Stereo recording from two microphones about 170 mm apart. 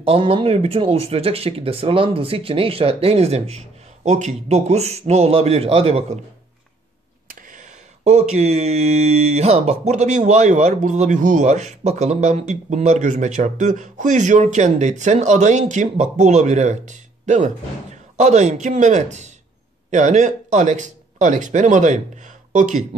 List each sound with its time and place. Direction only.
0.0 s speech: 35° right (ahead or behind)
7.2 s speech: 45° right (ahead or behind)